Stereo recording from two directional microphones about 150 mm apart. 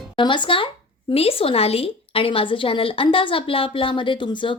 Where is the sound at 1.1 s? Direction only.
40° left (ahead or behind).